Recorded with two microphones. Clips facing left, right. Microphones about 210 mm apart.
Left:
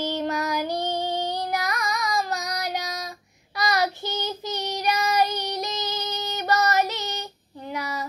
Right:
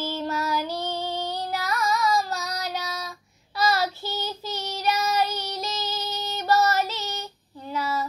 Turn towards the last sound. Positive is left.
turn(degrees=15)  # may be behind; listen again after turning